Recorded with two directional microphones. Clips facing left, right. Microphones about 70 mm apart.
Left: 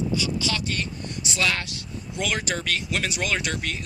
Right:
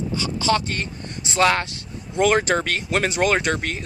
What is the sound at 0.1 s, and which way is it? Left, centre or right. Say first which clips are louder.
A man's voice: right 5 dB; right.